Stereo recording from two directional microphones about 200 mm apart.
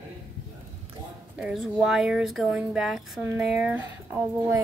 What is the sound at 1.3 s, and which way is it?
Speech, centre (ahead or behind).